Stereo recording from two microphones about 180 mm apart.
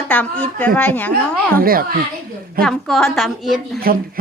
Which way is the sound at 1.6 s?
55° right (ahead or behind).